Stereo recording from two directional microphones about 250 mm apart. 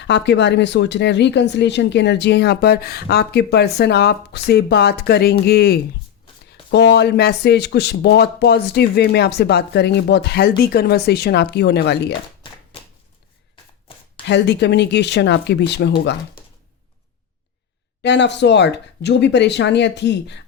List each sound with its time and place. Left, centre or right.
0.0 s speech: left
14.3 s speech: left
18.0 s speech: left